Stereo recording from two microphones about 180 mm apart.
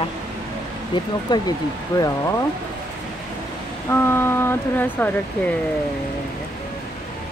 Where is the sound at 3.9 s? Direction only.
15° left (ahead or behind).